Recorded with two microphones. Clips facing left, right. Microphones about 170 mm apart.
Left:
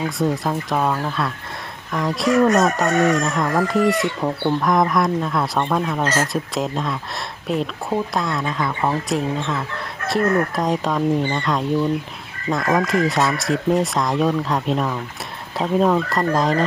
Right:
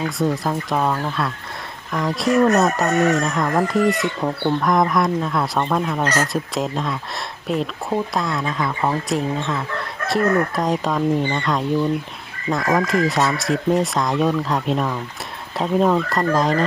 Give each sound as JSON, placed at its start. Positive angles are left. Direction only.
{"t": 0.2, "sound": "speech", "side_deg": 0}